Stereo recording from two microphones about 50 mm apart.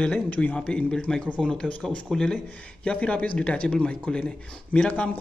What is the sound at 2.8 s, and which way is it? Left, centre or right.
Speech, left.